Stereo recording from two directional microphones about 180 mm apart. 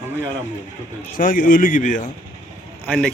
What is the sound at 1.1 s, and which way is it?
Speech, 50° left (ahead or behind).